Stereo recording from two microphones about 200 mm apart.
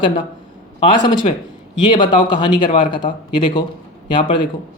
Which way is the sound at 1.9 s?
25° left (ahead or behind).